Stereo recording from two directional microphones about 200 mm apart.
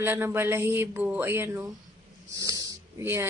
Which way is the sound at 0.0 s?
10° right (ahead or behind).